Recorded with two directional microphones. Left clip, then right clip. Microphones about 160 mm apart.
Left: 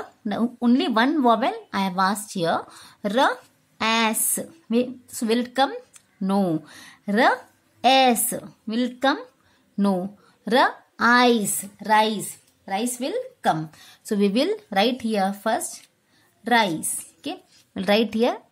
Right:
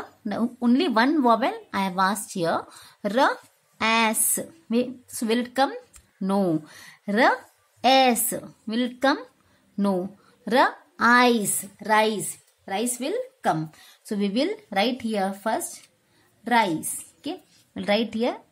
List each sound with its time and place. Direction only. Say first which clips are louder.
0.2 s a woman's voice: left 2 dB; 10° left (ahead or behind)
14.0 s a woman's voice: left 4 dB; 30° left (ahead or behind)